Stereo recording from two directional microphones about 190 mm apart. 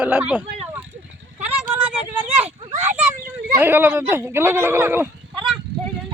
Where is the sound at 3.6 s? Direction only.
10° right (ahead or behind).